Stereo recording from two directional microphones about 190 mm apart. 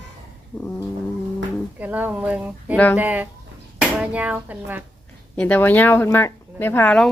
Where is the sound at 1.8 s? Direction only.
10° right (ahead or behind).